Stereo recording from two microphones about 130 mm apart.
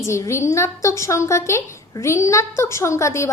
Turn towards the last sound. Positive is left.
turn(degrees=20)  # may be behind; listen again after turning